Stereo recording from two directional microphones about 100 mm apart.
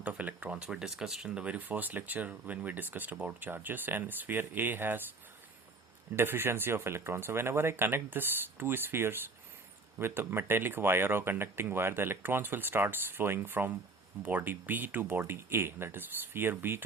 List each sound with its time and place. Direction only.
0.0 s speech: 15° right (ahead or behind)
6.1 s speech: 25° right (ahead or behind)